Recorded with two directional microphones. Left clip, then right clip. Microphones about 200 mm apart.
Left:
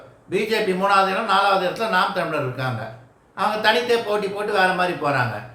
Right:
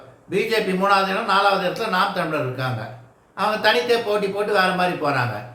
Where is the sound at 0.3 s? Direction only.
Centre (ahead or behind).